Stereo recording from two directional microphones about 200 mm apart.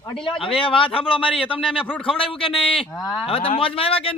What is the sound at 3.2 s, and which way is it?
Speech, 25° left (ahead or behind).